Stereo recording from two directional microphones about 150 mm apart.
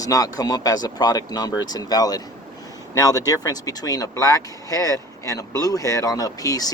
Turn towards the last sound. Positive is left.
turn(degrees=25)  # may be behind; listen again after turning